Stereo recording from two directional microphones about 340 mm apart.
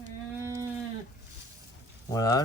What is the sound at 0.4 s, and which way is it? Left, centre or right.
Livestock, centre.